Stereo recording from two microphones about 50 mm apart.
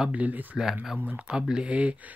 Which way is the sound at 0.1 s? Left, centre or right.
Right.